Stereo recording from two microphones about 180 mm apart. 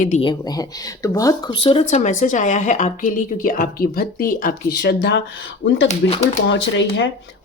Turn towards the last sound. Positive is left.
turn(degrees=85)